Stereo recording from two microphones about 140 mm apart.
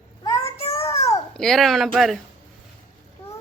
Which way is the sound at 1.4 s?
Centre (ahead or behind).